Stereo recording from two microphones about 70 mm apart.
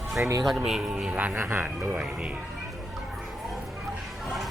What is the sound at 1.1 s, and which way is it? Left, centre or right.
Speech, right.